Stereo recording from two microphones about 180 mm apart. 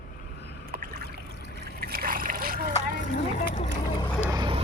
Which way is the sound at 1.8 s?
55° right (ahead or behind).